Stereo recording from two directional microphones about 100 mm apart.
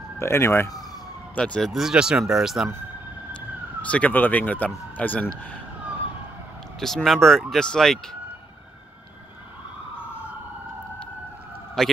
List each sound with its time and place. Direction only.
0.2 s speech: 25° left (ahead or behind)
1.3 s speech: 10° left (ahead or behind)
3.3 s speech: 15° left (ahead or behind)
6.8 s speech: 5° left (ahead or behind)
11.8 s speech: 5° left (ahead or behind)